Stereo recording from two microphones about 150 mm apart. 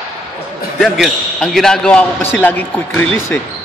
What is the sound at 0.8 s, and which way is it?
A man's voice, 5° left (ahead or behind).